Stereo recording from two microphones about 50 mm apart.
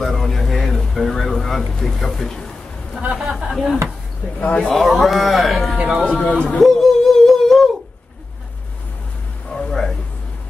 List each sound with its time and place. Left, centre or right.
0.0 s speech: centre
3.2 s speech: centre
3.4 s speech: centre
5.9 s speech: right
6.2 s speech: left
6.6 s humming: centre
9.5 s a sound: centre